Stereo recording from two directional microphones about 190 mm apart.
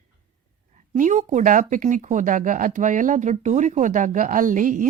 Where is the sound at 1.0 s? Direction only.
40° right (ahead or behind).